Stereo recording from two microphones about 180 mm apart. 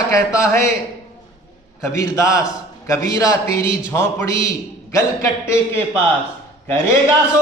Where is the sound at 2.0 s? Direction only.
15° left (ahead or behind).